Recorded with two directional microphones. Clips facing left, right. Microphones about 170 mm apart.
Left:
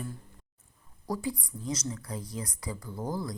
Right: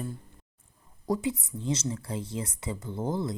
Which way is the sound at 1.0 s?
20° right (ahead or behind).